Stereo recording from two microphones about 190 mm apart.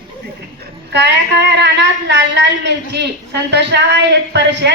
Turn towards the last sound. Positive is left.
turn(degrees=-65)  # may be behind; listen again after turning